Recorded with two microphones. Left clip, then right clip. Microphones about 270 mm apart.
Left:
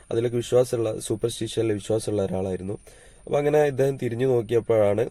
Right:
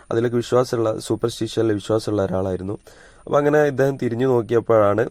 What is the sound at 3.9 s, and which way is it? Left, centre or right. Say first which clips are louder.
Speech: right 4 dB; centre.